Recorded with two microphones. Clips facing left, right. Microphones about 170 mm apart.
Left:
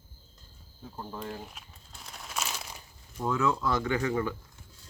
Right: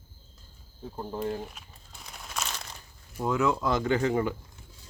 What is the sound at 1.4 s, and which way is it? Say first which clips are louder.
Crumpling: right 5 dB; centre (ahead or behind).